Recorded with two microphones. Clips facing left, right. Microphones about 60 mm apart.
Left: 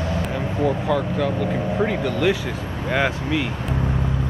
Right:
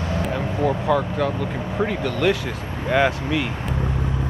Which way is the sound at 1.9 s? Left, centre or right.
Centre.